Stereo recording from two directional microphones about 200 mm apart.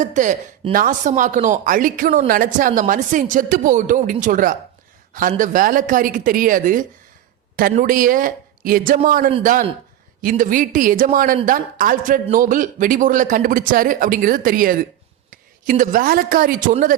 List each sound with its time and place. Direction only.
0.0 s a man's voice: 40° right (ahead or behind)